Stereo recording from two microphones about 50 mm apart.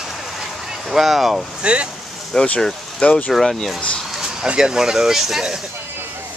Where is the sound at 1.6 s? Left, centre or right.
Right.